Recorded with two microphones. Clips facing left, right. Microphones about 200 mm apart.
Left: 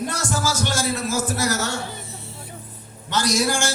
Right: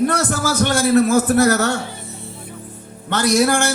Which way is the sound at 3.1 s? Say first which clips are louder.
Right 6 dB; 60° right (ahead or behind).